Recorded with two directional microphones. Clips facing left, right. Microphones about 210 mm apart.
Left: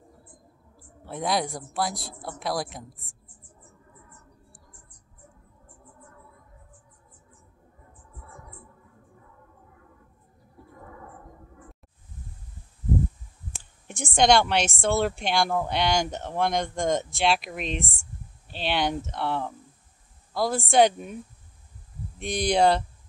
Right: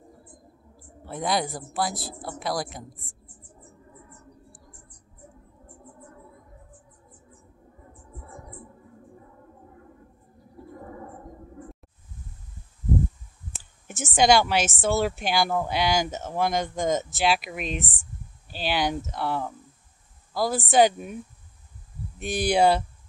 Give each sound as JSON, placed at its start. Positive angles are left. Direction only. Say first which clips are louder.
{"t": 1.0, "sound": "a woman's voice", "louder": "even", "side_deg": 0}
{"t": 8.2, "sound": "music", "louder": "right 4 dB", "side_deg": -35}
{"t": 10.8, "sound": "a sound", "louder": "right 4 dB", "side_deg": -35}
{"t": 13.8, "sound": "a woman's voice", "louder": "even", "side_deg": -5}
{"t": 22.2, "sound": "speech", "louder": "right 1 dB", "side_deg": -5}